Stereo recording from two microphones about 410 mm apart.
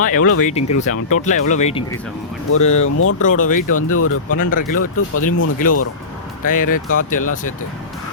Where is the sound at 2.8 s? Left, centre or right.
Left.